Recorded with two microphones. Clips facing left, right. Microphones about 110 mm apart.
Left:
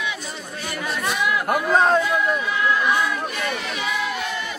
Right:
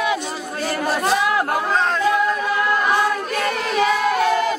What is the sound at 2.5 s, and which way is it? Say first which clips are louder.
Choir: right 2 dB; 55° right (ahead or behind).